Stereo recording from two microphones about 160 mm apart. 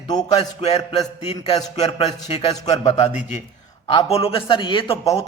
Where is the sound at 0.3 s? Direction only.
35° left (ahead or behind).